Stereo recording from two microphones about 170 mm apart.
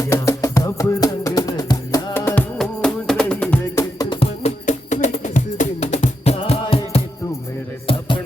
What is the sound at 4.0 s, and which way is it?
Music, 30° left (ahead or behind).